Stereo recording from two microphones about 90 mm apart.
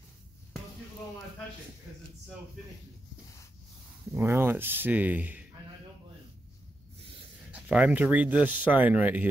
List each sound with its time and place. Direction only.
4.1 s speech: 30° right (ahead or behind)
7.5 s speech: 15° right (ahead or behind)